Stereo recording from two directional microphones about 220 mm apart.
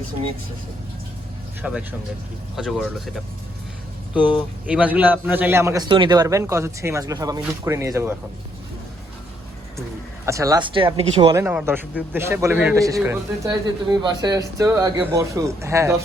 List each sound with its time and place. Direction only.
1.6 s speech: 5° right (ahead or behind)
4.6 s a man's voice: 5° right (ahead or behind)
10.2 s speech: 15° right (ahead or behind)
11.4 s a man's voice: 10° right (ahead or behind)